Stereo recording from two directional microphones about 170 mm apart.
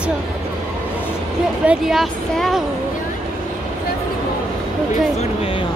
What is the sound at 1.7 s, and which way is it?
Speech, centre (ahead or behind).